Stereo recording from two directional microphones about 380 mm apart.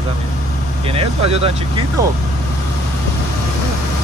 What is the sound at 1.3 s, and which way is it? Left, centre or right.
Speech, centre.